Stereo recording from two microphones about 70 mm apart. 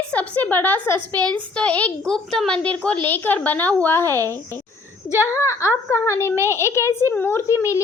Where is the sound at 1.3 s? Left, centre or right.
Centre.